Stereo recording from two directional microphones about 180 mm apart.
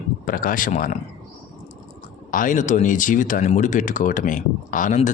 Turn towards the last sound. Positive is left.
turn(degrees=45)  # may be behind; listen again after turning